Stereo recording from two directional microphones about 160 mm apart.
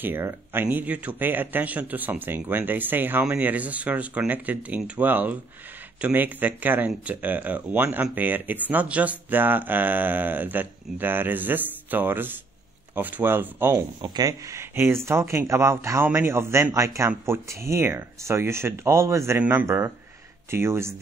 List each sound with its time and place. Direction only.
0.0 s speech: 15° right (ahead or behind)
13.7 s speech: 25° right (ahead or behind)